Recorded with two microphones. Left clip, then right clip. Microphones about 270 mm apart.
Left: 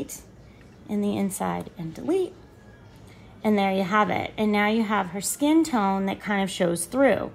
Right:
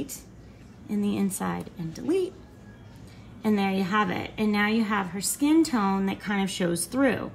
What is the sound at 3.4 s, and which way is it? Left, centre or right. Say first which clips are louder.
A woman's voice: left 4 dB; left.